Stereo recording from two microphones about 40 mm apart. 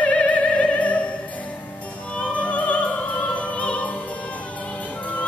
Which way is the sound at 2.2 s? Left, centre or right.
Left.